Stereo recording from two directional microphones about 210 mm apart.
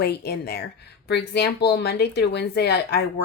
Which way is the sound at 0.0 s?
50° left (ahead or behind).